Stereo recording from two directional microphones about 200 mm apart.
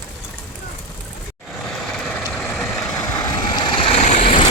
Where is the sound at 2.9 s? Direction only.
15° left (ahead or behind); by 4.5 s 35° left (ahead or behind).